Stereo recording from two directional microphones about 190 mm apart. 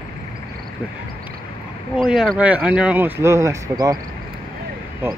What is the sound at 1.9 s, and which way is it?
Speech, centre (ahead or behind).